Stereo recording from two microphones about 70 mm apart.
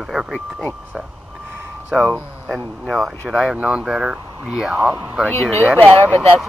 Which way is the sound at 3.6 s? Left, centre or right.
Centre.